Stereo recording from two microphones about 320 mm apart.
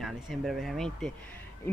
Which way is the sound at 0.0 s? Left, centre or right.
Centre.